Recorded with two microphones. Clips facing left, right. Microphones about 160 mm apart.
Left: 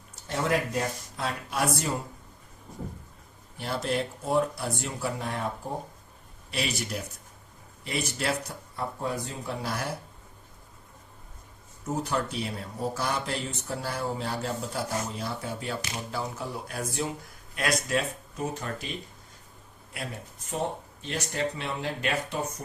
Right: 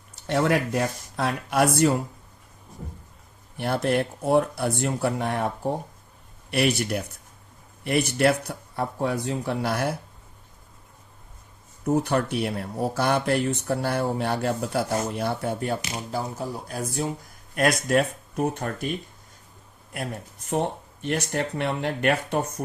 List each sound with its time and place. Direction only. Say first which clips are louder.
0.3 s speech: right 5 dB; 70° right (ahead or behind)
3.6 s speech: right 6 dB; 60° right (ahead or behind)
6.5 s speech: right 8 dB; 60° right (ahead or behind)
11.9 s speech: right 7 dB; 65° right (ahead or behind); by 17.1 s 40° right (ahead or behind)
17.5 s speech: right 6 dB; 50° right (ahead or behind)
20.5 s speech: right 5 dB; 60° right (ahead or behind)